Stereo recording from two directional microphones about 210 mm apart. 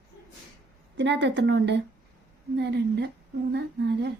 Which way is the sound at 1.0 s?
55° right (ahead or behind).